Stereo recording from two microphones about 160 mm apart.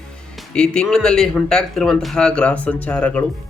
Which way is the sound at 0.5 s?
5° left (ahead or behind).